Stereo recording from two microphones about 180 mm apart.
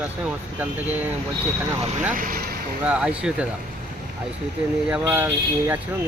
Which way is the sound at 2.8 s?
5° right (ahead or behind).